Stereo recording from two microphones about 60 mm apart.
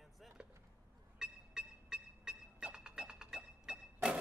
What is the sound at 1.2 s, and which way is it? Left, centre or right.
Music, centre.